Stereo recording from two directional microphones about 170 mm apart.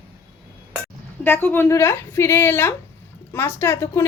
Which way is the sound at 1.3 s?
10° left (ahead or behind).